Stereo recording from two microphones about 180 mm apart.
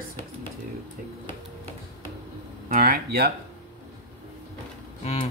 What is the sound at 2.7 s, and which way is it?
Speech, 55° right (ahead or behind).